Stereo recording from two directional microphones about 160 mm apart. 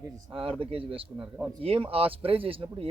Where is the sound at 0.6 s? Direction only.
35° right (ahead or behind).